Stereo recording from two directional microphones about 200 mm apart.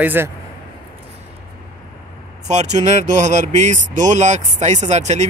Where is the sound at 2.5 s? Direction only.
35° right (ahead or behind).